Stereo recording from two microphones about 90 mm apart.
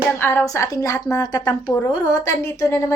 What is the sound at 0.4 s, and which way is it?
A woman's voice, 35° left (ahead or behind).